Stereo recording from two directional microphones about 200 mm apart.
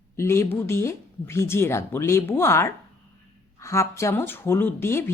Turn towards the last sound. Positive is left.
turn(degrees=10)  # may be behind; listen again after turning